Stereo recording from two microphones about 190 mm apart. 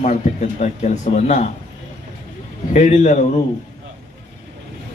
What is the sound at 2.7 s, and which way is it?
Speech, 40° left (ahead or behind).